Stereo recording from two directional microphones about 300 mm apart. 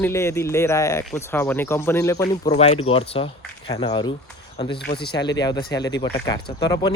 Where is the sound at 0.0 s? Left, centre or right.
Centre.